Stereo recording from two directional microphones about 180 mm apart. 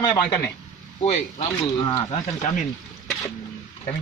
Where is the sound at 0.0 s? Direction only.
25° left (ahead or behind).